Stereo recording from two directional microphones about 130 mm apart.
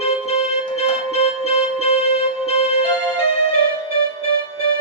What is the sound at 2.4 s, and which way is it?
Music, 50° left (ahead or behind).